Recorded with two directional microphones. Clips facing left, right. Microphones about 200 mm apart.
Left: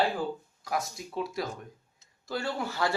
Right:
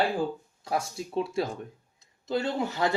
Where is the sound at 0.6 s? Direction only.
30° right (ahead or behind).